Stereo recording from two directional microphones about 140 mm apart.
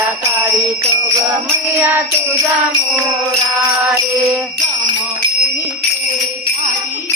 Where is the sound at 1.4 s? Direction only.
20° right (ahead or behind).